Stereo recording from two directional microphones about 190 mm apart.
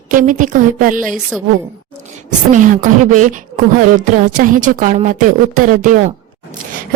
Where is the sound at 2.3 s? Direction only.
40° right (ahead or behind).